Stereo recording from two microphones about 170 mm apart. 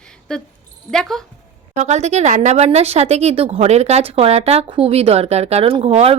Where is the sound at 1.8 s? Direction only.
40° right (ahead or behind).